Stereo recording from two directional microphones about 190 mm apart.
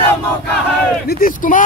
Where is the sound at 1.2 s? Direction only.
45° left (ahead or behind).